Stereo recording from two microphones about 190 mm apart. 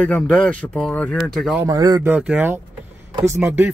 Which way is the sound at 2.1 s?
10° right (ahead or behind).